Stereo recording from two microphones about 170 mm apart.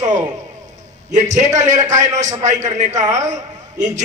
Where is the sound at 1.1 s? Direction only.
45° right (ahead or behind).